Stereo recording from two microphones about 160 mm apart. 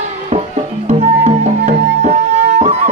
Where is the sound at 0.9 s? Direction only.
45° right (ahead or behind).